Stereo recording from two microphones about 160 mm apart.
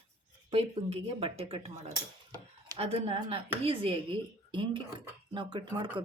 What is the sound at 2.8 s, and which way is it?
Speech, 40° right (ahead or behind).